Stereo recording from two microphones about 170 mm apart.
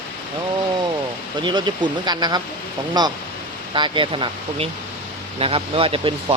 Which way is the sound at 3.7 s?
30° right (ahead or behind).